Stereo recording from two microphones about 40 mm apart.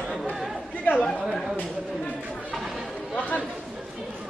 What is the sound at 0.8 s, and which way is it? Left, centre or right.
Chatter, left.